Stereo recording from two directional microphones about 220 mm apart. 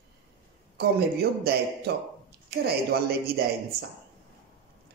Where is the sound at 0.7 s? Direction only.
45° right (ahead or behind).